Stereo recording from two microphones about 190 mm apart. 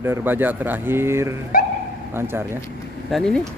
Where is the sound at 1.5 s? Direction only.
50° left (ahead or behind).